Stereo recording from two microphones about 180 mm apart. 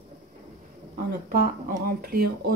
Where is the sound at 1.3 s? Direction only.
55° right (ahead or behind).